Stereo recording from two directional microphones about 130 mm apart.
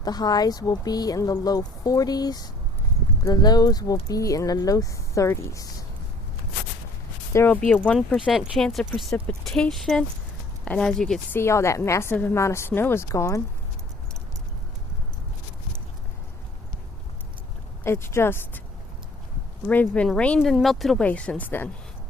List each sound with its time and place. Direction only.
0.0 s speech: 30° left (ahead or behind)
7.3 s speech: 15° left (ahead or behind)
7.9 s speech: centre (ahead or behind)
9.0 s speech: 15° left (ahead or behind)
11.3 s speech: 20° left (ahead or behind)
17.8 s speech: 20° left (ahead or behind)
19.6 s speech: 10° left (ahead or behind)